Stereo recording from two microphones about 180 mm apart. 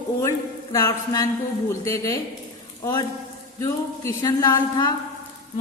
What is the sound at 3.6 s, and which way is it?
A woman's voice, 15° left (ahead or behind).